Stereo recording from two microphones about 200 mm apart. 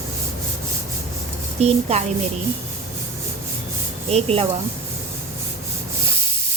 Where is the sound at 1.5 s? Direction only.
30° right (ahead or behind).